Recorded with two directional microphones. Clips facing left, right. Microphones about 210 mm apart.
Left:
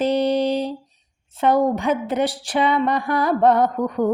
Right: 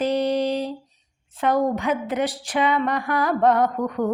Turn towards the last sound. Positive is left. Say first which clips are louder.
# left 2 dB
turn(degrees=30)  # may be behind; listen again after turning